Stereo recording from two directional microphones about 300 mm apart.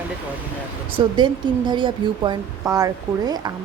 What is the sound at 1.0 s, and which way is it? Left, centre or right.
Speech, centre.